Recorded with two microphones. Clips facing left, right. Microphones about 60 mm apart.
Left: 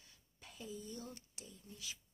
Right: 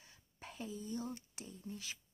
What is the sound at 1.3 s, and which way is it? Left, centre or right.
Speech, right.